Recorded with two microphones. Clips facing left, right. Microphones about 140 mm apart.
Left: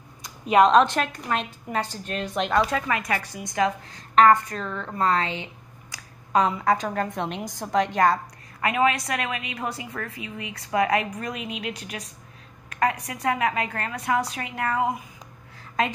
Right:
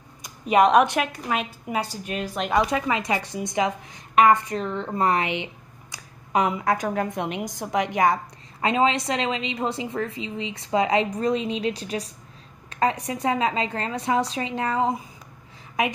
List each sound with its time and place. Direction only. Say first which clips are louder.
0.5 s a woman's voice: even; 10° right (ahead or behind)
2.6 s a woman's voice: right 1 dB; 15° right (ahead or behind)